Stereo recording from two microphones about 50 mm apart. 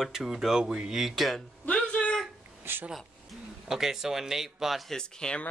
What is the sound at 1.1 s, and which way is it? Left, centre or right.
Speech, centre.